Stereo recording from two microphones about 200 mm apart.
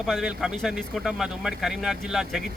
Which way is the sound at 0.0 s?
Centre (ahead or behind).